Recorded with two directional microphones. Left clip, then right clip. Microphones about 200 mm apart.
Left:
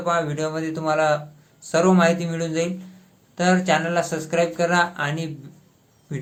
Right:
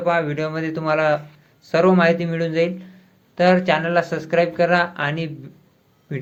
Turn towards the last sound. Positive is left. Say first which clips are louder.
# right 4 dB
turn(degrees=0)  # may be behind; listen again after turning